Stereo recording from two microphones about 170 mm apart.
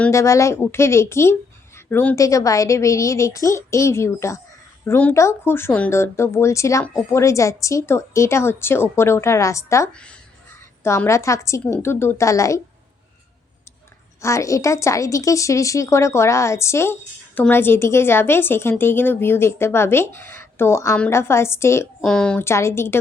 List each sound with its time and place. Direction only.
0.0 s speech: 15° left (ahead or behind)
14.2 s speech: 15° left (ahead or behind)
22.0 s speech: 5° left (ahead or behind)